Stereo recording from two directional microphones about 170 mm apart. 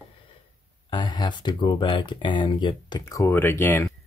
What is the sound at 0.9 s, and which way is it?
Speech, 25° left (ahead or behind).